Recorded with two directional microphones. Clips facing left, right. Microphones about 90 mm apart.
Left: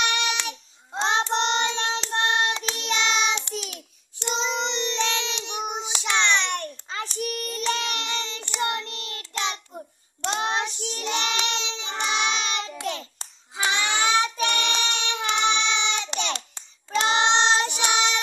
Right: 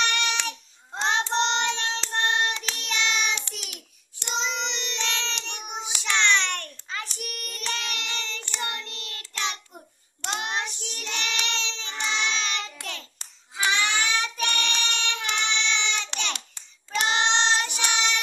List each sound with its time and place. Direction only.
0.0 s child singing: 10° left (ahead or behind)
0.9 s child singing: 20° left (ahead or behind)
4.4 s child singing: 20° left (ahead or behind)
6.0 s a sound: 15° left (ahead or behind)
6.9 s child singing: 30° left (ahead or behind)
16.3 s child singing: 30° left (ahead or behind)